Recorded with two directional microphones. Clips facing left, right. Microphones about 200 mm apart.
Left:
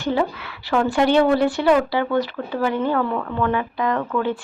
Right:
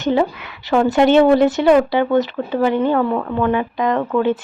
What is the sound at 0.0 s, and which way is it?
A woman's voice, 20° right (ahead or behind).